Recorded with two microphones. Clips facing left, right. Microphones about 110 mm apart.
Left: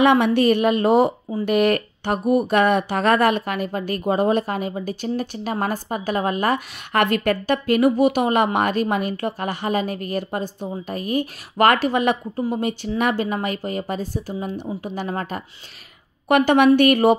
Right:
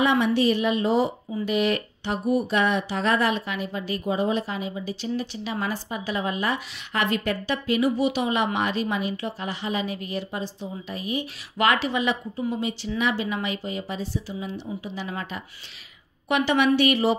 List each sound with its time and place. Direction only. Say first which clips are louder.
0.0 s a woman's voice: left 5 dB; 60° left (ahead or behind)